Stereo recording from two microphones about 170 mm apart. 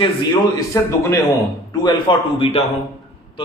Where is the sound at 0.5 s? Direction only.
20° left (ahead or behind).